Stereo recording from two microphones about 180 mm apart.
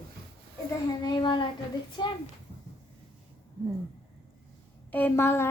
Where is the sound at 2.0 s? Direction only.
25° left (ahead or behind).